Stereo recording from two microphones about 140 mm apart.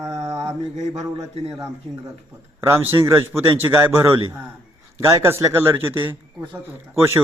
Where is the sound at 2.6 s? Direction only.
15° right (ahead or behind).